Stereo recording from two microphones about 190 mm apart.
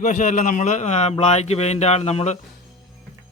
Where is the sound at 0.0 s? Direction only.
45° left (ahead or behind).